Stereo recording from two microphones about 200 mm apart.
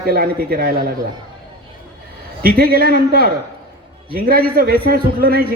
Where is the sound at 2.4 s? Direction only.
50° right (ahead or behind).